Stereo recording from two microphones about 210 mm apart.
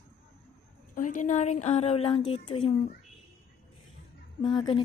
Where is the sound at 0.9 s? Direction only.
35° left (ahead or behind).